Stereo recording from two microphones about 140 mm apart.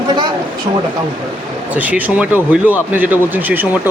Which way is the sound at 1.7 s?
10° right (ahead or behind).